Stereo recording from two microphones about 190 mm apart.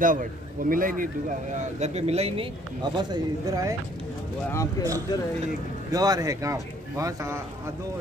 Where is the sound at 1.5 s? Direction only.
35° right (ahead or behind).